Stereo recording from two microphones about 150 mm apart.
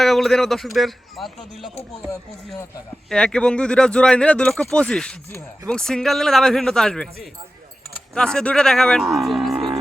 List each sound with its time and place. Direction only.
0.0 s speech: centre (ahead or behind)
3.1 s speech: 5° left (ahead or behind)
8.1 s speech: 5° left (ahead or behind)